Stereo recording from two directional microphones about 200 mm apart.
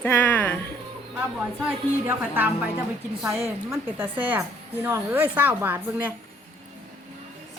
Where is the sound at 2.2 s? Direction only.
10° right (ahead or behind).